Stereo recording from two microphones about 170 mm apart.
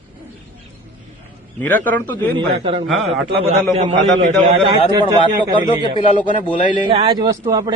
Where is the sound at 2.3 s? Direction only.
30° right (ahead or behind).